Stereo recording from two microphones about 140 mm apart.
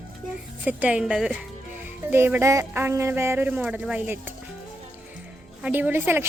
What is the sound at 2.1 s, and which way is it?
Speech, 15° right (ahead or behind).